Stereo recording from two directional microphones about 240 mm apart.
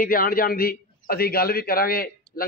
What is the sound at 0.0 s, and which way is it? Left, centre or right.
A man's voice, left.